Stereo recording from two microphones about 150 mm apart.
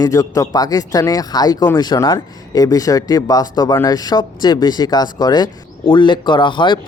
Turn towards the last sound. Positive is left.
turn(degrees=30)  # may be behind; listen again after turning